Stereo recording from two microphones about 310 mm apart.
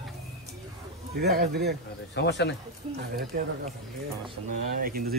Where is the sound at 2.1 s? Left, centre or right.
Left.